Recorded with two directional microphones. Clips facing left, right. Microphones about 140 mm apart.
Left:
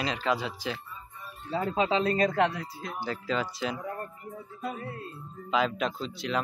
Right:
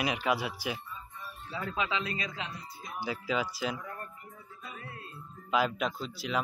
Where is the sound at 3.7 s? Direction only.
30° left (ahead or behind).